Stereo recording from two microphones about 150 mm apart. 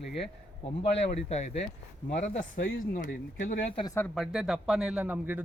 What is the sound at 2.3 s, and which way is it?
Speech, 65° left (ahead or behind).